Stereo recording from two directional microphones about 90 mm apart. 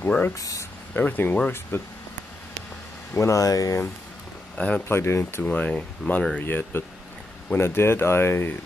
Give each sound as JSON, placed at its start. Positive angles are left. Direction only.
{"t": 0.0, "sound": "speech", "side_deg": 20}
{"t": 0.4, "sound": "speech", "side_deg": 40}
{"t": 0.9, "sound": "speech", "side_deg": 20}
{"t": 3.2, "sound": "speech", "side_deg": 35}
{"t": 4.6, "sound": "speech", "side_deg": 15}
{"t": 4.8, "sound": "speech", "side_deg": 30}
{"t": 5.4, "sound": "speech", "side_deg": 15}